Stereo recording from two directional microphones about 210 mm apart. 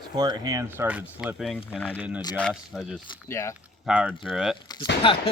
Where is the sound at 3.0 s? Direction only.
20° left (ahead or behind).